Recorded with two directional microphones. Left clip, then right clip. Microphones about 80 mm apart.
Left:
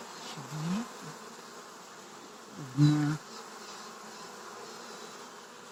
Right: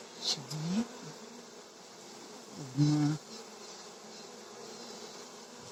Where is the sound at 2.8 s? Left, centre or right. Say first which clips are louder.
Left 2 dB; right.